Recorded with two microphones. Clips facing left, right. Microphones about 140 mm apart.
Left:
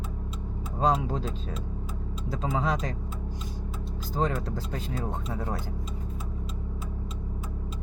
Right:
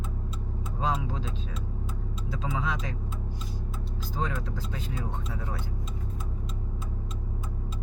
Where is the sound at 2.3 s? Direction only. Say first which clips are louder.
Left 4 dB; 40° left (ahead or behind).